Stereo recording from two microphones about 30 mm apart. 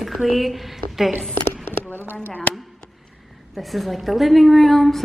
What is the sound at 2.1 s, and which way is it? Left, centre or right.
Speech, left.